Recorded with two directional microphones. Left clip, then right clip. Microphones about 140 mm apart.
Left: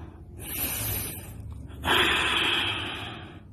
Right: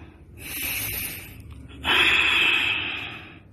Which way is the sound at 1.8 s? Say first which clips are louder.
Right 4 dB; 45° left (ahead or behind).